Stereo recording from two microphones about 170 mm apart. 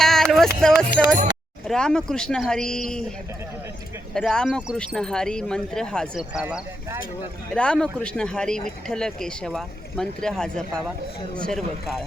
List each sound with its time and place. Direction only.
0.0 s music: centre (ahead or behind)
1.6 s speech: 5° left (ahead or behind)
4.1 s speech: 5° left (ahead or behind)
7.5 s speech: 5° left (ahead or behind)